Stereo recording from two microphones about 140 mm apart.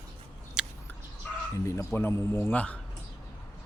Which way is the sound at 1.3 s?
10° left (ahead or behind).